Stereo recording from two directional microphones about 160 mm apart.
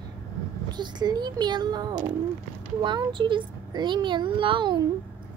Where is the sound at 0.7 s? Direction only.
25° right (ahead or behind).